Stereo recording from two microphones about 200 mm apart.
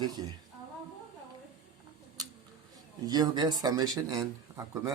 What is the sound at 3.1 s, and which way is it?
Speech, 20° right (ahead or behind).